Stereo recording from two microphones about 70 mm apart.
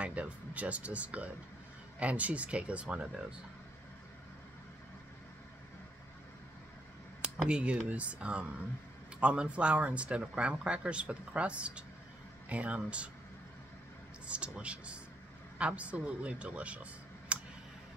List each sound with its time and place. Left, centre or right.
0.0 s speech: centre
7.2 s speech: centre
14.2 s speech: centre